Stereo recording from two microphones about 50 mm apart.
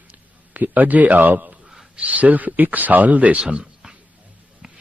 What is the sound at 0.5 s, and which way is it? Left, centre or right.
Speech, right.